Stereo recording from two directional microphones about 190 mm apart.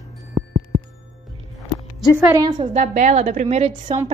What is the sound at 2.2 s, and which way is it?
Speech, 15° right (ahead or behind).